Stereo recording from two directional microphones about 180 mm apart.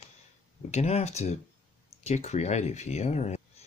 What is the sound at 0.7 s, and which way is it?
Speech, 35° left (ahead or behind).